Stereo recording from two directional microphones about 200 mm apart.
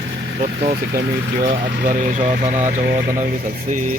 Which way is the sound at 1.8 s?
40° right (ahead or behind).